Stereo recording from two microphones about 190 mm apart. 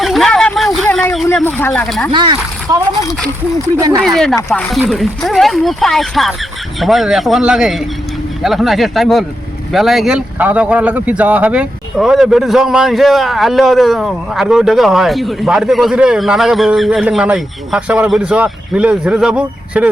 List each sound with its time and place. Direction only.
0.0 s vehicle: centre (ahead or behind)
1.1 s speech: centre (ahead or behind)
2.1 s speech: 25° right (ahead or behind)
4.0 s speech: centre (ahead or behind)